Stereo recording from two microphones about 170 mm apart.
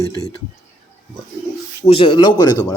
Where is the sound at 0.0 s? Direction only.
20° left (ahead or behind).